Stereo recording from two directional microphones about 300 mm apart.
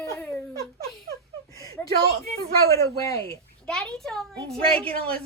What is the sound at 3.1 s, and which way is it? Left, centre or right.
A child's voice, centre.